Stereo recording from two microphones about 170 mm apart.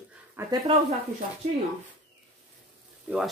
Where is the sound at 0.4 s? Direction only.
20° right (ahead or behind).